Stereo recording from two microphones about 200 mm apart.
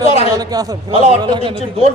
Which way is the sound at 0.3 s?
20° right (ahead or behind).